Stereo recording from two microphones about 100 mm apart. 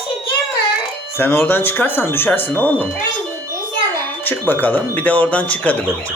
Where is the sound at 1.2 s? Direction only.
20° left (ahead or behind).